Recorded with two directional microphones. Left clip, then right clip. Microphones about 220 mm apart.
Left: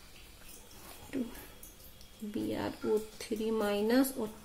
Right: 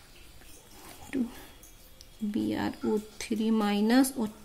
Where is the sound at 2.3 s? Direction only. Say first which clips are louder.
Right 4 dB; 50° right (ahead or behind).